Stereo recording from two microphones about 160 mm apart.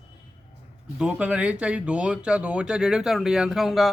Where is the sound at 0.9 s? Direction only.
5° right (ahead or behind).